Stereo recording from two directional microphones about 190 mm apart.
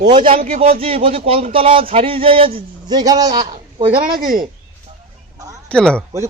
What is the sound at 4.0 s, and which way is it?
Speech, 50° right (ahead or behind).